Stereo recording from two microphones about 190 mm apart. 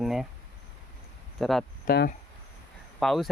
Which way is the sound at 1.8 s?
55° left (ahead or behind).